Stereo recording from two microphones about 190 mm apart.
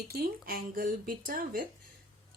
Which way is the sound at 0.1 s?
50° right (ahead or behind).